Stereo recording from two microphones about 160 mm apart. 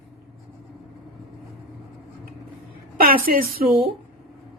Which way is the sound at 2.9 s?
65° right (ahead or behind).